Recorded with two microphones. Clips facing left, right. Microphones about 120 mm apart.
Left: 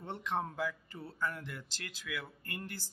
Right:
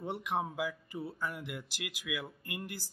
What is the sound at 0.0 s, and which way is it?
Speech, 15° right (ahead or behind).